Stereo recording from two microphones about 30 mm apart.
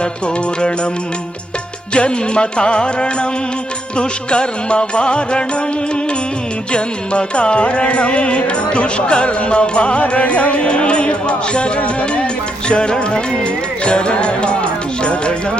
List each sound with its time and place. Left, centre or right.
1.9 s music: left
11.9 s speech: left